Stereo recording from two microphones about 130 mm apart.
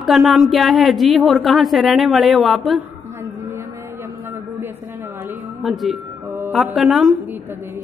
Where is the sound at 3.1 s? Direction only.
20° right (ahead or behind).